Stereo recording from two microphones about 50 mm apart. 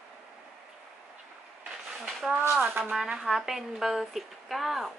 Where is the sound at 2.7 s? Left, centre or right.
Right.